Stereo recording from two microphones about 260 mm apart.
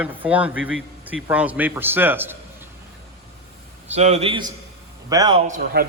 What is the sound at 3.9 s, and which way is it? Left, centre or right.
A man's voice, right.